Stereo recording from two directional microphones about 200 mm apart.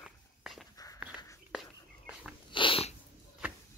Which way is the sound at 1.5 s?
5° right (ahead or behind).